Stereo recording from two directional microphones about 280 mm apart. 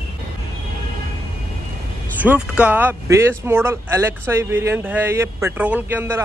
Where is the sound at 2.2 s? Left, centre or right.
Centre.